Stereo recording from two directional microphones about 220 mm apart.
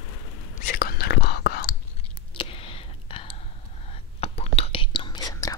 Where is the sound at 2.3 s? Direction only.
25° left (ahead or behind).